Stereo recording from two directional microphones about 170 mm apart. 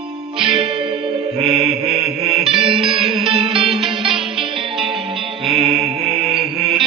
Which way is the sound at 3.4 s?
30° right (ahead or behind).